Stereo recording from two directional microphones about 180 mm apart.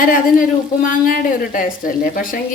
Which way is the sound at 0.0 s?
50° left (ahead or behind).